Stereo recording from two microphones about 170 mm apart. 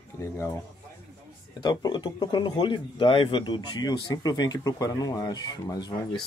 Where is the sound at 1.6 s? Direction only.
25° left (ahead or behind).